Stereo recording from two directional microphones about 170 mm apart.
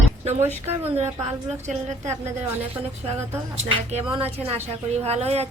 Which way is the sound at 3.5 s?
40° right (ahead or behind).